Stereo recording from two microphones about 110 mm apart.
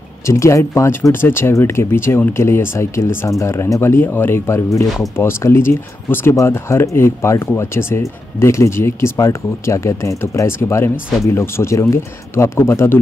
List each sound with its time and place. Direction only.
0.3 s speech: 25° left (ahead or behind)